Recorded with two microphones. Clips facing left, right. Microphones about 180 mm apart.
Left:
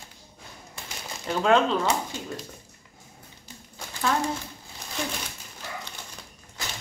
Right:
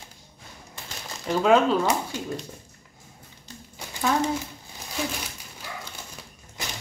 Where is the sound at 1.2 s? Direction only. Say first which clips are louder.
Right 2 dB; centre (ahead or behind).